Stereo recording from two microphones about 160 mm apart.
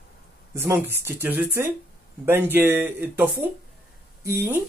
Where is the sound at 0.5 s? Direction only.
15° right (ahead or behind).